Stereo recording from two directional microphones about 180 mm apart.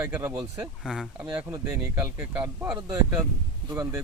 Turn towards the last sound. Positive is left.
turn(degrees=-15)  # may be behind; listen again after turning